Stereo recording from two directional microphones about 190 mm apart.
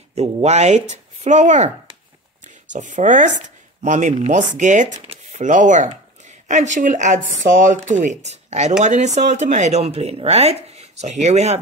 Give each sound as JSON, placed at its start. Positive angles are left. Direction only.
{"t": 0.1, "sound": "speech", "side_deg": -35}
{"t": 2.7, "sound": "speech", "side_deg": -40}